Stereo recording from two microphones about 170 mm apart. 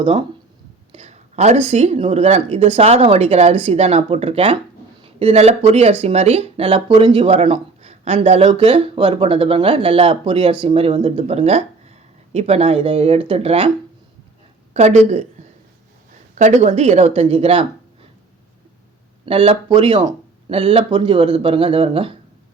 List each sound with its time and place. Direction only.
0.0 s speech: 30° right (ahead or behind)
0.9 s speech: 40° right (ahead or behind)
14.7 s speech: 40° right (ahead or behind)
16.3 s speech: 45° right (ahead or behind)
19.2 s speech: 30° right (ahead or behind)